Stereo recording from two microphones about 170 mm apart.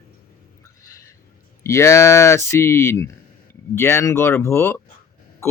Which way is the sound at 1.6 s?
15° left (ahead or behind).